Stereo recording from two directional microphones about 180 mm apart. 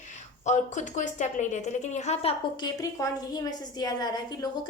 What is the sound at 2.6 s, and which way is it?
A woman's voice, 20° left (ahead or behind).